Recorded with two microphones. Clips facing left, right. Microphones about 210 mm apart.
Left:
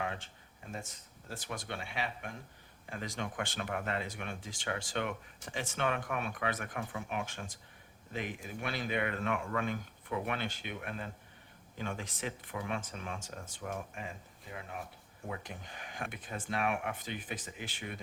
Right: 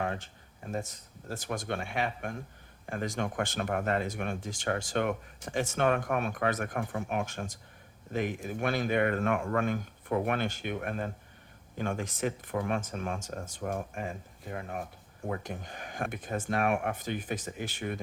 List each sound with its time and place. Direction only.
0.0 s speech: 45° right (ahead or behind)